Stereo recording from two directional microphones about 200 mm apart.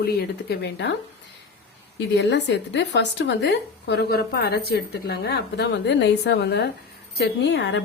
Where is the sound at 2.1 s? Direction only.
60° left (ahead or behind).